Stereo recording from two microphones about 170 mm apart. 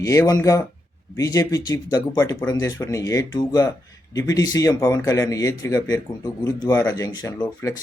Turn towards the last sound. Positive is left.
turn(degrees=20)  # may be behind; listen again after turning